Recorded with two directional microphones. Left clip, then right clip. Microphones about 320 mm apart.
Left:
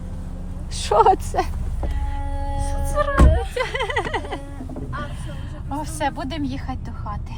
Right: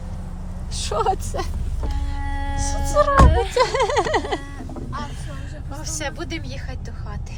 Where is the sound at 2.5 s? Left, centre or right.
Centre.